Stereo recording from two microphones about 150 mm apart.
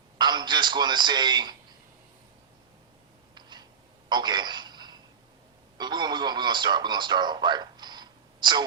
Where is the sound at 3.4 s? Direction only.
30° right (ahead or behind).